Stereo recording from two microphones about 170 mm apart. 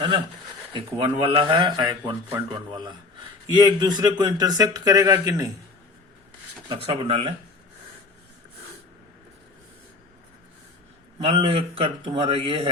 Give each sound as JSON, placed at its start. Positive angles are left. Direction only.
{"t": 0.7, "sound": "a man's voice", "side_deg": -30}
{"t": 6.8, "sound": "a man's voice", "side_deg": -35}
{"t": 11.3, "sound": "a man's voice", "side_deg": -35}